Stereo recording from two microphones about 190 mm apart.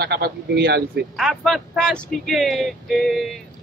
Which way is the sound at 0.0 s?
55° right (ahead or behind).